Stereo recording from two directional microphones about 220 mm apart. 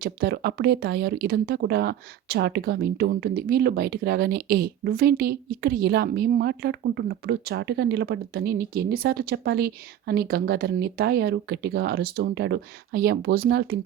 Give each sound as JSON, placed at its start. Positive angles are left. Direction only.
{"t": 0.0, "sound": "speech", "side_deg": -45}